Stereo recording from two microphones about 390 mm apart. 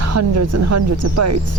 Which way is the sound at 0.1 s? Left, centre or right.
Right.